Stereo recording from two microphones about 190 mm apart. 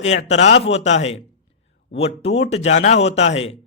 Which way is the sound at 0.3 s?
35° left (ahead or behind).